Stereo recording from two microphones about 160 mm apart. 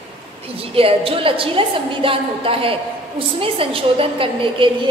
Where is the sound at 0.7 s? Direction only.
35° right (ahead or behind).